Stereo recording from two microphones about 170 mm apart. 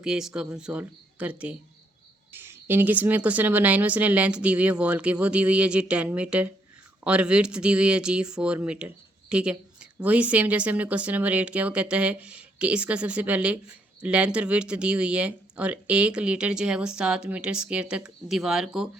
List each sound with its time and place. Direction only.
0.0 s a woman's voice: 5° right (ahead or behind)